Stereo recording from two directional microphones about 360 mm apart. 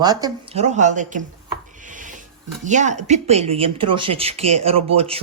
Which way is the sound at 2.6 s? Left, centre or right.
Centre.